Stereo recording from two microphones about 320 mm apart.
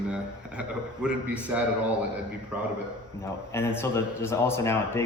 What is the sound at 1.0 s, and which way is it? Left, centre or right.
Speech, centre.